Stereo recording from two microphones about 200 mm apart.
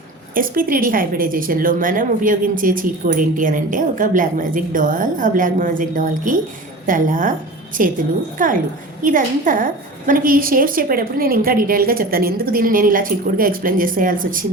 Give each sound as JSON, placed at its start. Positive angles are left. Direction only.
{"t": 0.3, "sound": "a woman's voice", "side_deg": -45}